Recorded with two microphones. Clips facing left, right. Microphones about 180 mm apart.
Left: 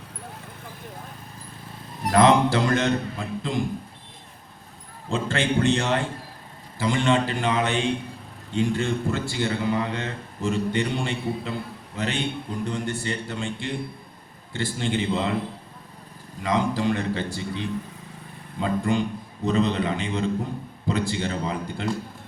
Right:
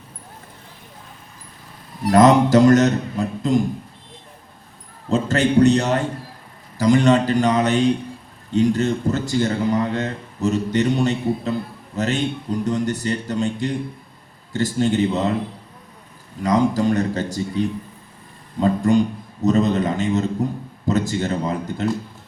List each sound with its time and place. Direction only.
2.1 s a man's voice: 40° right (ahead or behind)
5.0 s a man's voice: 40° right (ahead or behind)
16.4 s a man's voice: 40° right (ahead or behind)